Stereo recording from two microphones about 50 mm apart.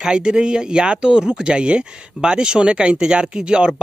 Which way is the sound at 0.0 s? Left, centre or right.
Centre.